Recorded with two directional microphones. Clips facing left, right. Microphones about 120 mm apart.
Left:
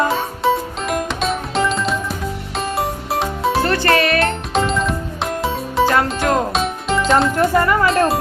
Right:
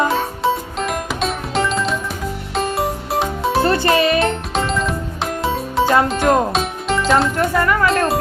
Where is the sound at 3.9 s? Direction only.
25° right (ahead or behind).